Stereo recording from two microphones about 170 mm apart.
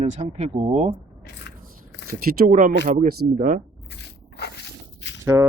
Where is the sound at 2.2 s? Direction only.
60° right (ahead or behind).